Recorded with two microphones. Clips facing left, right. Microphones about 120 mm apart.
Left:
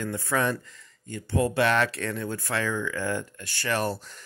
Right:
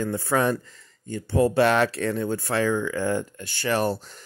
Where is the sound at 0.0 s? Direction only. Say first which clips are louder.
Right 4 dB; 30° right (ahead or behind).